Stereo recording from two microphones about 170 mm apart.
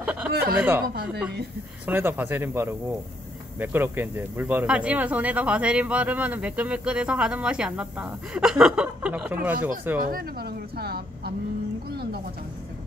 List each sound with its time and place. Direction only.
0.0 s a sound: 10° right (ahead or behind)
0.3 s speech: 65° right (ahead or behind)
0.6 s speech: 10° right (ahead or behind)
1.9 s speech: 10° right (ahead or behind)
10.0 s speech: 65° right (ahead or behind)